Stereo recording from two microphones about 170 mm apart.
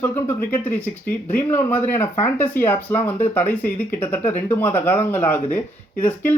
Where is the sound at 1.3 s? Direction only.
10° left (ahead or behind).